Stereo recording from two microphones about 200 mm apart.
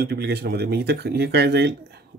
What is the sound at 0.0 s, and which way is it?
Speech, 55° right (ahead or behind).